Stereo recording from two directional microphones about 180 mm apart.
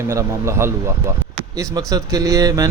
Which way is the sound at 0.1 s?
15° right (ahead or behind).